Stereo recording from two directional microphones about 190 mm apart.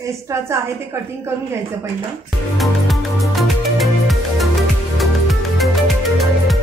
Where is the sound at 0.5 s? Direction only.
15° right (ahead or behind).